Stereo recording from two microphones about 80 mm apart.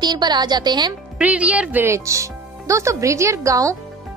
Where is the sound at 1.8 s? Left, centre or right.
Right.